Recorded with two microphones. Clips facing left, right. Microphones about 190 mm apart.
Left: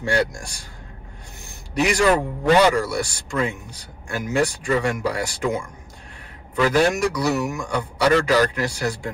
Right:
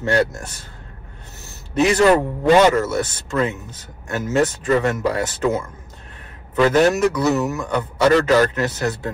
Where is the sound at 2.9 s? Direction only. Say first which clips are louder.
Right 3 dB; 15° left (ahead or behind).